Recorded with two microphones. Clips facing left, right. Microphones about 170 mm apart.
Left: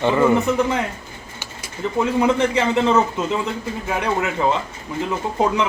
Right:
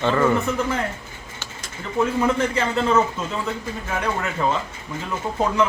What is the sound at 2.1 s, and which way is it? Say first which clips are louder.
Speech: left 3 dB; 15° left (ahead or behind).